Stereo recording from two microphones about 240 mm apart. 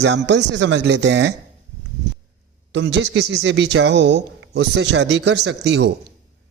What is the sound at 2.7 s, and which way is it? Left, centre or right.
Speech, right.